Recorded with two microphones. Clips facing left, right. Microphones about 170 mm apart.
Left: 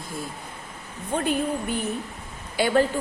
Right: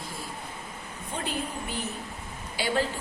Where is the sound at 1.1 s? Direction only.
55° left (ahead or behind).